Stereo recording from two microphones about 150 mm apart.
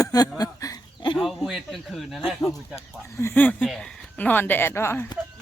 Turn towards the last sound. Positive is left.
turn(degrees=15)  # may be behind; listen again after turning